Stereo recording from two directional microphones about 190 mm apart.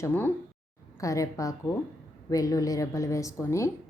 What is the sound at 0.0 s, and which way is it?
A woman's voice, 10° left (ahead or behind).